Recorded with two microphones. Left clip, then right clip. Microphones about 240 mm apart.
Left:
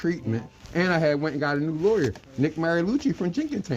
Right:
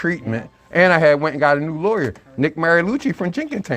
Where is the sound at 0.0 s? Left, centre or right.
Right.